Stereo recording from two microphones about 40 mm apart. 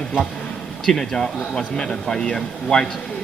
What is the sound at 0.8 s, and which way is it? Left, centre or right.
Speech, centre.